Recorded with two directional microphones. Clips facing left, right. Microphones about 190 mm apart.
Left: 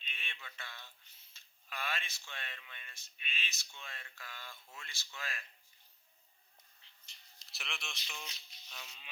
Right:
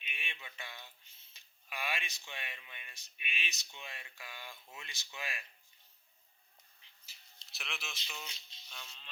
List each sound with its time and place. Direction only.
0.0 s speech: 15° right (ahead or behind)
7.1 s a sound: 5° right (ahead or behind)
7.4 s speech: centre (ahead or behind)
8.0 s toothbrush: 5° right (ahead or behind)